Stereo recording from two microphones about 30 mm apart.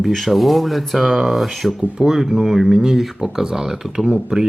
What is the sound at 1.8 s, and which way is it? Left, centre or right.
Speech, centre.